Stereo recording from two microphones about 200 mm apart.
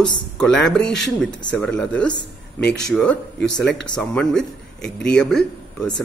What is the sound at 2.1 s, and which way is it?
Speech, 55° left (ahead or behind).